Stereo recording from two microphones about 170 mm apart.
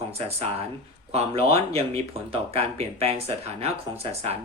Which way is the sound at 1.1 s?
35° right (ahead or behind).